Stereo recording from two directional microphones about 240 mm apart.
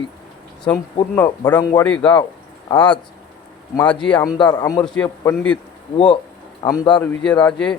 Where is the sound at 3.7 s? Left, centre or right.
Centre.